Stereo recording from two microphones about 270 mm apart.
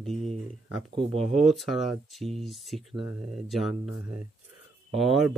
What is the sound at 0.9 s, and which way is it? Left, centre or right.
Speech, right.